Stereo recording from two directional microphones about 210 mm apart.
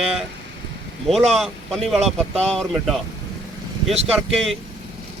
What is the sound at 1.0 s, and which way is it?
Speech, centre (ahead or behind).